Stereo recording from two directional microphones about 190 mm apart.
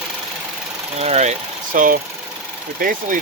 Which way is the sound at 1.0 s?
35° right (ahead or behind).